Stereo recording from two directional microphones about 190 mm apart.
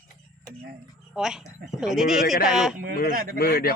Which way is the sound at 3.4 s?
55° left (ahead or behind).